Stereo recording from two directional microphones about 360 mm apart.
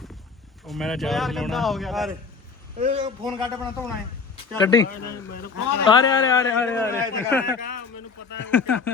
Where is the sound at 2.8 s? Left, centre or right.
Centre.